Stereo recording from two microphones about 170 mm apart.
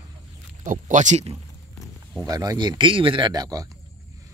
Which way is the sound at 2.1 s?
20° right (ahead or behind).